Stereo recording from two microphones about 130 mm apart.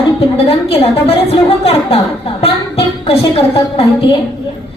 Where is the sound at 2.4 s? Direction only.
50° left (ahead or behind).